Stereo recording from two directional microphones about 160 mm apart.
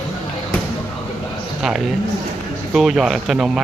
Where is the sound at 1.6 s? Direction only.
5° right (ahead or behind).